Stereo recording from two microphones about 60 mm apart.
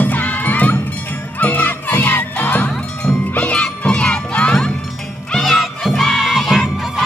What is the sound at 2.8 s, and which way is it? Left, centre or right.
Music, centre.